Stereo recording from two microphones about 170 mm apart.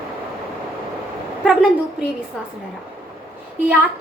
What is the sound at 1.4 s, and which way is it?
Speech, 5° right (ahead or behind).